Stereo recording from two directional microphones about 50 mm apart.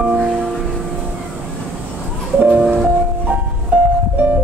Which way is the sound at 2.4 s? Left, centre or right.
Right.